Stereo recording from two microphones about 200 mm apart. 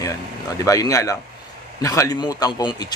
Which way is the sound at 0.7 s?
15° left (ahead or behind).